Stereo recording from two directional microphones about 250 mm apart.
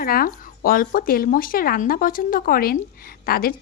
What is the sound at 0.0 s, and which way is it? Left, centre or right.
Speech, left.